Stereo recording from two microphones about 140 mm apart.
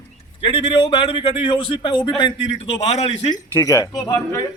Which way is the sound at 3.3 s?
25° left (ahead or behind).